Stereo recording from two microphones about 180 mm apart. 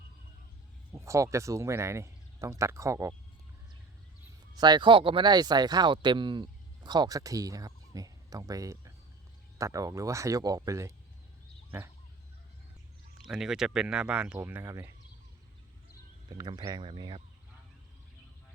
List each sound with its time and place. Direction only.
0.9 s speech: 15° right (ahead or behind)
4.5 s speech: 25° right (ahead or behind)
13.2 s speech: 5° right (ahead or behind)
16.3 s speech: 25° right (ahead or behind)